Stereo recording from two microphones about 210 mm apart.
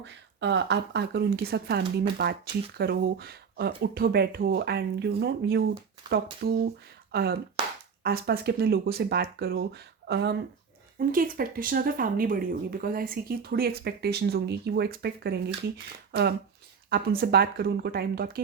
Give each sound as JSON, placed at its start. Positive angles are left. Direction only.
{"t": 0.0, "sound": "speech", "side_deg": -60}
{"t": 6.0, "sound": "speech", "side_deg": -20}
{"t": 6.4, "sound": "speech", "side_deg": -50}
{"t": 11.1, "sound": "speech", "side_deg": -40}
{"t": 16.9, "sound": "speech", "side_deg": -50}